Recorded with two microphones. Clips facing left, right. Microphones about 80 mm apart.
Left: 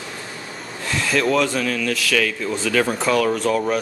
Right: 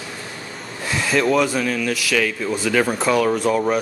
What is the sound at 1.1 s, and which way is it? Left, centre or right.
Speech, centre.